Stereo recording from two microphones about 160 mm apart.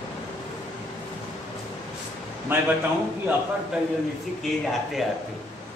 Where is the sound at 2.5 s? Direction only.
15° right (ahead or behind).